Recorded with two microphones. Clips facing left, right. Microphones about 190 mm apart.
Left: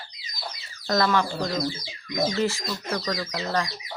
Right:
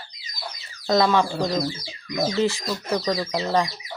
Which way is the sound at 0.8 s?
15° right (ahead or behind).